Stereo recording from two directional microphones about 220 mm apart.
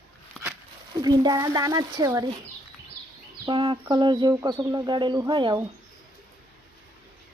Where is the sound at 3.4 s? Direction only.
20° right (ahead or behind).